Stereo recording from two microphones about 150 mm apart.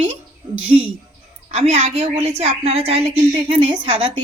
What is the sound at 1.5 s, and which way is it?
A woman's voice, 45° right (ahead or behind).